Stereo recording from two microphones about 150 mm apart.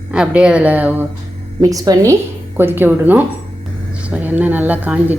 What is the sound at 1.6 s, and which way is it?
A woman's voice, 25° right (ahead or behind).